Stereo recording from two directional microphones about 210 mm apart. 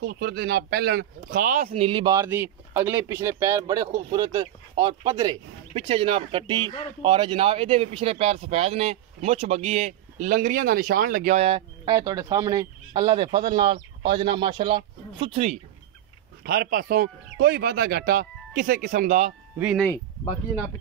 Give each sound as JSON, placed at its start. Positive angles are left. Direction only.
{"t": 0.0, "sound": "speech", "side_deg": -50}
{"t": 16.4, "sound": "speech", "side_deg": -45}
{"t": 19.6, "sound": "speech", "side_deg": -5}